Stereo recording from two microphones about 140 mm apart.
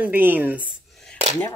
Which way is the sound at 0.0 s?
15° right (ahead or behind).